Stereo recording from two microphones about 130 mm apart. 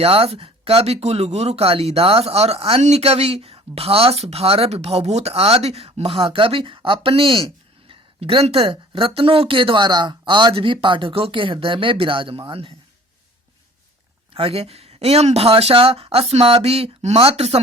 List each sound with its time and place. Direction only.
0.0 s speech: 50° right (ahead or behind)
14.3 s speech: 45° right (ahead or behind)